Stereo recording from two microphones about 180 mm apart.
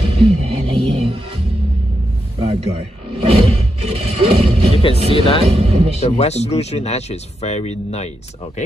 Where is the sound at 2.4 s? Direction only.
30° right (ahead or behind).